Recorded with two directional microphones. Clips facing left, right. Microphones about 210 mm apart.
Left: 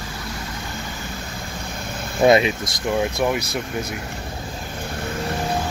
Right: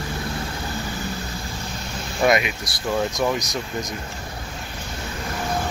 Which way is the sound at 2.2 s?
25° left (ahead or behind).